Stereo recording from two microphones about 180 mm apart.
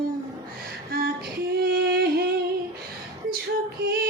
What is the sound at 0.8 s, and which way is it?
Female singing, 60° right (ahead or behind).